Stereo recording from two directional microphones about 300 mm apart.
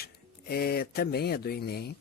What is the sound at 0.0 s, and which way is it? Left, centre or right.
Speech, left.